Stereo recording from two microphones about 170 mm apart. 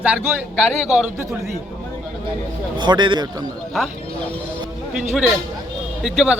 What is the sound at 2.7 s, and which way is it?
Speech, 25° right (ahead or behind).